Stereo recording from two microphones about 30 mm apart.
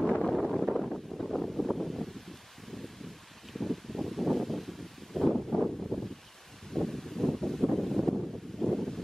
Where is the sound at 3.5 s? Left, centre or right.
Centre.